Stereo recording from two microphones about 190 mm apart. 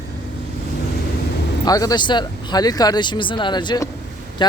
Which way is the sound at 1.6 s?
20° left (ahead or behind).